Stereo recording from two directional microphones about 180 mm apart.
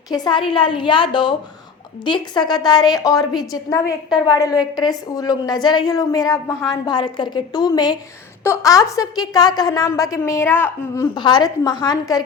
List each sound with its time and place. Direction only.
0.1 s a woman's voice: 25° left (ahead or behind)
11.1 s a woman's voice: 25° left (ahead or behind)